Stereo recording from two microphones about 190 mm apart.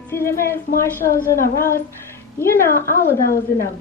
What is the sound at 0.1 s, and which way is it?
A woman's voice, 15° left (ahead or behind).